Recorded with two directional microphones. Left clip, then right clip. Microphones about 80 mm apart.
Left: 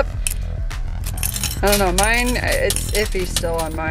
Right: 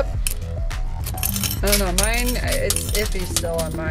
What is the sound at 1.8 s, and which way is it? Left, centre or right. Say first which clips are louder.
Speech: left 5 dB; left.